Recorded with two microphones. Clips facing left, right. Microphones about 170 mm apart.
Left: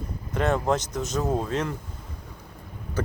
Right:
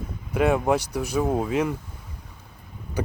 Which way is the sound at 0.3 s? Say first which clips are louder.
Right 3 dB; 10° right (ahead or behind).